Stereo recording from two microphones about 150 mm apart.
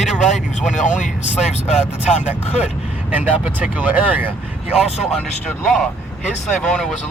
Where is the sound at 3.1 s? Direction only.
10° right (ahead or behind).